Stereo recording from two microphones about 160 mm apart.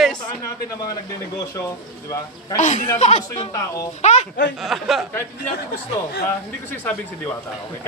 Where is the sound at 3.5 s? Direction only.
20° left (ahead or behind).